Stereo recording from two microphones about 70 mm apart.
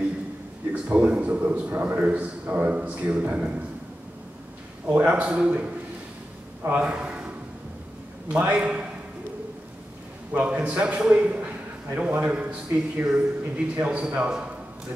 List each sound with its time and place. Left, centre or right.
0.7 s a man's voice: centre
4.9 s a man's voice: right
6.8 s a sound: centre
8.3 s a man's voice: centre
10.4 s a man's voice: right